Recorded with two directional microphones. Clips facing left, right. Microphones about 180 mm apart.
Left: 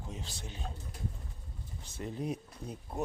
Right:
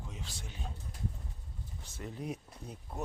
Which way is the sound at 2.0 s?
25° left (ahead or behind).